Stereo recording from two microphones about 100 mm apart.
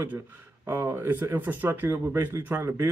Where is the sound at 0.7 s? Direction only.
25° right (ahead or behind).